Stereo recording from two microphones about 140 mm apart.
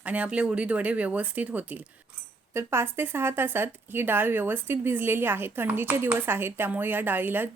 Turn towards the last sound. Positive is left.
turn(degrees=-15)  # may be behind; listen again after turning